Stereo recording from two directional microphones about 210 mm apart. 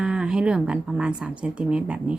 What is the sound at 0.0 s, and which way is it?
Speech, 5° right (ahead or behind).